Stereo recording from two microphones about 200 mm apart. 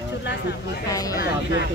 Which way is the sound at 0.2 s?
60° left (ahead or behind).